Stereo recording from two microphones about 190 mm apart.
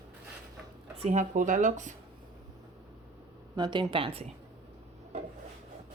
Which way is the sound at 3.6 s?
25° right (ahead or behind).